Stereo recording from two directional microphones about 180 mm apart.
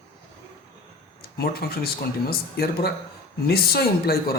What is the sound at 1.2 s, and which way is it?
Speech, 60° left (ahead or behind).